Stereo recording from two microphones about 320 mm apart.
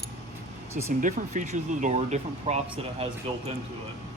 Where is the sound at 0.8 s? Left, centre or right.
Right.